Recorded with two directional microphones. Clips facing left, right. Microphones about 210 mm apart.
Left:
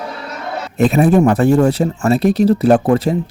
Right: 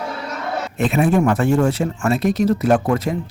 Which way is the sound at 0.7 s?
40° left (ahead or behind).